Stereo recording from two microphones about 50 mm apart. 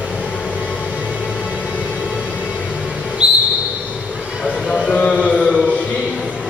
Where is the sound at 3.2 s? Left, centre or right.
Right.